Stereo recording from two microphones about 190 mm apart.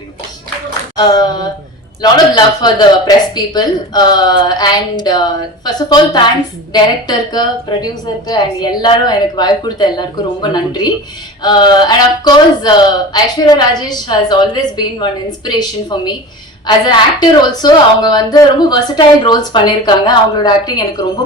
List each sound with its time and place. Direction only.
0.9 s speech: 20° left (ahead or behind)